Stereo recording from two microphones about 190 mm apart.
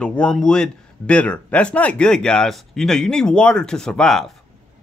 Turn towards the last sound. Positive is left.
turn(degrees=0)  # may be behind; listen again after turning